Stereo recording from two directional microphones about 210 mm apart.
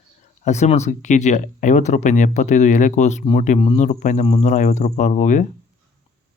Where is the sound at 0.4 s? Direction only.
35° left (ahead or behind).